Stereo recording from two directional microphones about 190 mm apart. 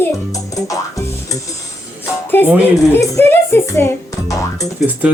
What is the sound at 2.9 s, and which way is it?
Speech, 15° left (ahead or behind).